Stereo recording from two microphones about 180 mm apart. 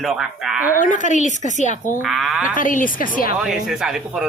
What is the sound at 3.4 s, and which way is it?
Speech, 5° right (ahead or behind).